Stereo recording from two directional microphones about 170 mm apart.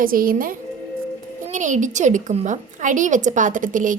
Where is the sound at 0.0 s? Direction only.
55° right (ahead or behind).